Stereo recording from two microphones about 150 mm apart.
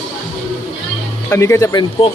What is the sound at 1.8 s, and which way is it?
Speech, 35° left (ahead or behind).